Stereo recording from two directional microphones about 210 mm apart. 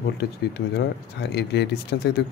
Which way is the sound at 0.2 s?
50° left (ahead or behind).